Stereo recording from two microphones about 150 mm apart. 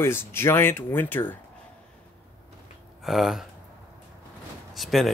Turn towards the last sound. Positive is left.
turn(degrees=0)  # may be behind; listen again after turning